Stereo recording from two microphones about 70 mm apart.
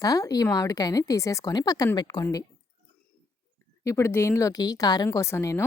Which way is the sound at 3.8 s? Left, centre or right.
Left.